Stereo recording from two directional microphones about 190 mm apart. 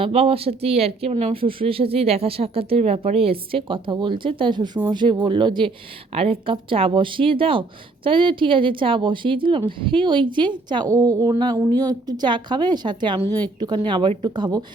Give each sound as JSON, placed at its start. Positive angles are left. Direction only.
{"t": 0.0, "sound": "speech", "side_deg": -30}